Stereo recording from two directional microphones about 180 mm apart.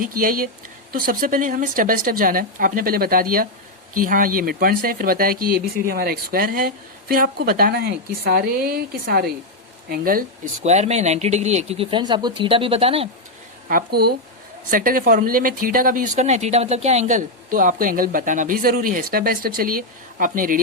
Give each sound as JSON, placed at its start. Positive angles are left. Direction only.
{"t": 0.0, "sound": "speech", "side_deg": -50}
{"t": 10.6, "sound": "speech", "side_deg": -40}
{"t": 13.7, "sound": "speech", "side_deg": -55}